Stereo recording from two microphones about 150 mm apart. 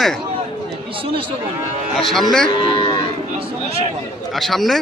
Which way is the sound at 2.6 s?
35° left (ahead or behind).